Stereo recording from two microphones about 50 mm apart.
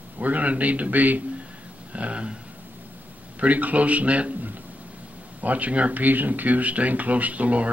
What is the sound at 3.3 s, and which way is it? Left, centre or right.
Speech, right.